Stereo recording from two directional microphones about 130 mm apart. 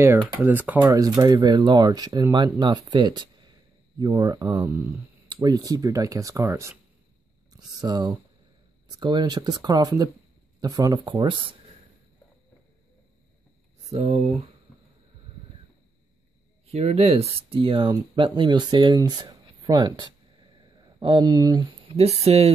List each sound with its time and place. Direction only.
0.0 s speech: 15° right (ahead or behind)
0.7 s speech: 30° right (ahead or behind)
7.8 s speech: 30° right (ahead or behind)
13.8 s speech: 55° right (ahead or behind)
16.7 s speech: 50° right (ahead or behind); by 21.6 s 30° right (ahead or behind)
21.8 s speech: 55° right (ahead or behind)